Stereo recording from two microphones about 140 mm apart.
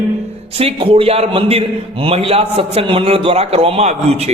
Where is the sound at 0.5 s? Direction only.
40° right (ahead or behind).